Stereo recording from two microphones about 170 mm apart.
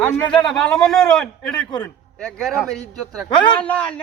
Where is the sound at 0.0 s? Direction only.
10° left (ahead or behind).